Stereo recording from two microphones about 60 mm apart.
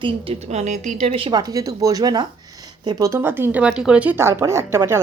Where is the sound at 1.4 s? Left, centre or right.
Right.